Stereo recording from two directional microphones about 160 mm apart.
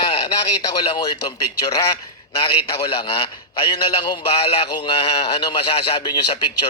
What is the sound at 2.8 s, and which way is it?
A man's voice, 35° left (ahead or behind).